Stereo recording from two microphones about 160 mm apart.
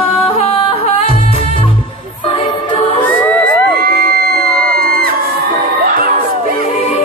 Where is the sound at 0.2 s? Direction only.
35° left (ahead or behind).